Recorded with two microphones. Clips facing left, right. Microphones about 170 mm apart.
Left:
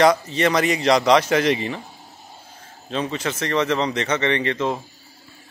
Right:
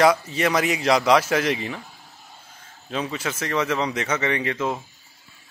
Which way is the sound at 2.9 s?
5° right (ahead or behind).